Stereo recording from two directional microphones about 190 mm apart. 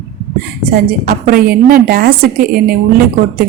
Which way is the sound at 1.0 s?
50° right (ahead or behind).